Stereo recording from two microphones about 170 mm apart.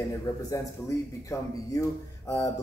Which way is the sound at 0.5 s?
20° left (ahead or behind).